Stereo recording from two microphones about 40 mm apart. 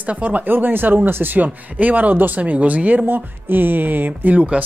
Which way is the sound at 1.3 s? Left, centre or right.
Right.